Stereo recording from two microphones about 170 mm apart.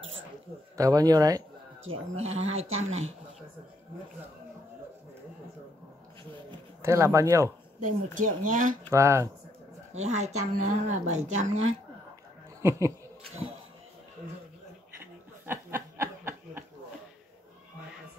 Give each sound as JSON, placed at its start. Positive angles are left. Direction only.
{"t": 0.7, "sound": "speech", "side_deg": -20}
{"t": 1.9, "sound": "speech", "side_deg": -40}
{"t": 6.8, "sound": "speech", "side_deg": -15}
{"t": 7.8, "sound": "speech", "side_deg": -50}
{"t": 8.9, "sound": "speech", "side_deg": -15}
{"t": 9.9, "sound": "speech", "side_deg": -40}
{"t": 12.6, "sound": "speech", "side_deg": -15}
{"t": 15.0, "sound": "snicker", "side_deg": -15}